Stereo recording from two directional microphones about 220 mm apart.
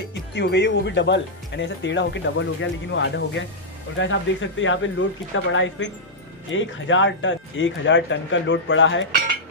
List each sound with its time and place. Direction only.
0.1 s speech: 50° left (ahead or behind)